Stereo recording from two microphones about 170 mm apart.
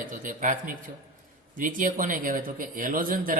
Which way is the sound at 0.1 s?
50° right (ahead or behind).